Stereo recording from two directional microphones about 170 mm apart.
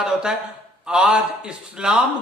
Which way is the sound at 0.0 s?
5° right (ahead or behind).